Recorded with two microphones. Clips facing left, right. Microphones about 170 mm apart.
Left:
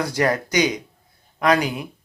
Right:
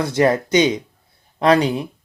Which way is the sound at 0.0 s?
25° right (ahead or behind).